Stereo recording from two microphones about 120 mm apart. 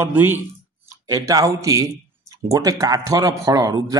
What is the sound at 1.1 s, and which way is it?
A man's voice, 30° right (ahead or behind).